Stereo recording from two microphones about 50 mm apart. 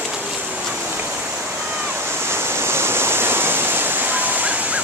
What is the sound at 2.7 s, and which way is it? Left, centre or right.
Waves, right.